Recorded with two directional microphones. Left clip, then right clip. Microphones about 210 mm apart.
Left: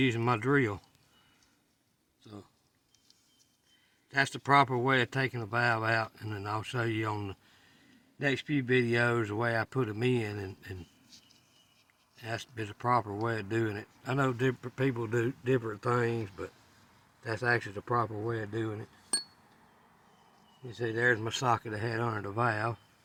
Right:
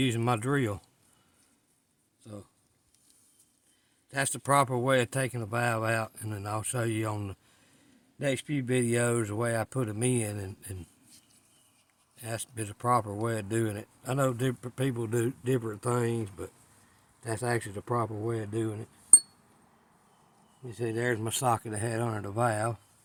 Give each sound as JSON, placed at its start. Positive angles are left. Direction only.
{"t": 0.0, "sound": "speech", "side_deg": -50}
{"t": 2.2, "sound": "speech", "side_deg": -45}
{"t": 4.1, "sound": "speech", "side_deg": -55}
{"t": 20.7, "sound": "speech", "side_deg": -45}